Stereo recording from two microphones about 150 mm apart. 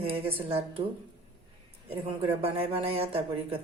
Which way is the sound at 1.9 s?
35° right (ahead or behind).